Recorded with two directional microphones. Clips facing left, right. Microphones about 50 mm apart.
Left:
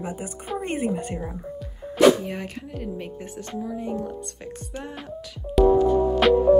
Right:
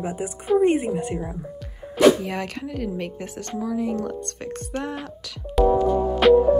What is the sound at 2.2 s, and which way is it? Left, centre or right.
Speech, right.